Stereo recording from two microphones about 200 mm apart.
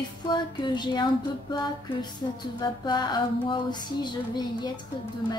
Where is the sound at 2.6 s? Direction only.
20° left (ahead or behind).